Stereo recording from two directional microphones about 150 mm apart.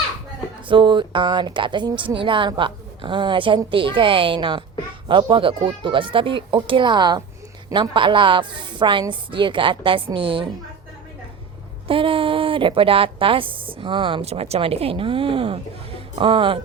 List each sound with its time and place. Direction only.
0.7 s a woman's voice: 30° right (ahead or behind)
11.9 s a woman's voice: 35° right (ahead or behind)